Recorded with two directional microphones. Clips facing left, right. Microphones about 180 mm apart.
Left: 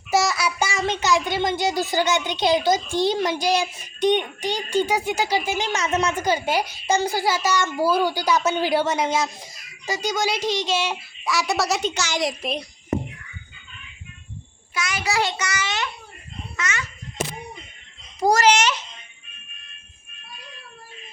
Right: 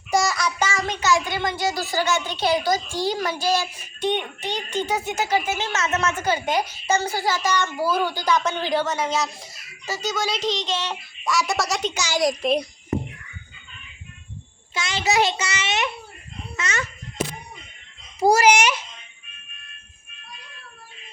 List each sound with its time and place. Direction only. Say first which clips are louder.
0.1 s child singing: left 1 dB; 5° left (ahead or behind)
0.9 s speech: left 2 dB; 20° left (ahead or behind); by 11.9 s centre (ahead or behind)
11.9 s a child's voice: right 1 dB; 10° right (ahead or behind)
12.2 s a child's voice: right 8 dB; centre (ahead or behind)
14.7 s a child's voice: right 2 dB; 25° right (ahead or behind)
18.2 s a child's voice: right 1 dB; 10° right (ahead or behind)